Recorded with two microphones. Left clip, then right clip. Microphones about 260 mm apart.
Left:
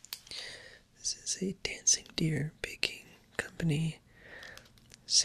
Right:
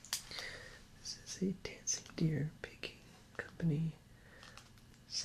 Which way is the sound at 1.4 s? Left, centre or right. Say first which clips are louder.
Left 7 dB; left.